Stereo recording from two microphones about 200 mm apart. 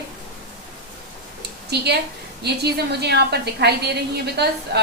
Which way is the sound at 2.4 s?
55° right (ahead or behind).